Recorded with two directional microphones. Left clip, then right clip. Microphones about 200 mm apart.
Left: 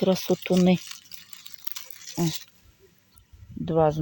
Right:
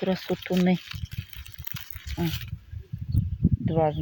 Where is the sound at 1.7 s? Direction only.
5° left (ahead or behind).